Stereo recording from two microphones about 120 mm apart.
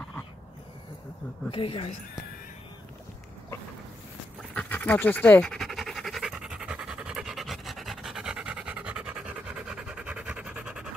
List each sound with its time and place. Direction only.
1.5 s speech: 45° left (ahead or behind)
4.6 s pant: 15° left (ahead or behind); by 10.9 s 10° right (ahead or behind)